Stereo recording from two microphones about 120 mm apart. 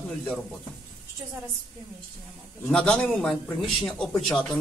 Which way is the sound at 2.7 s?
10° left (ahead or behind).